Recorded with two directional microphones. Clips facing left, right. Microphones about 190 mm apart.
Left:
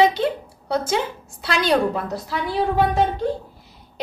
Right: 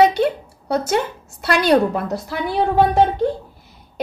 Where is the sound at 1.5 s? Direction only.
55° right (ahead or behind).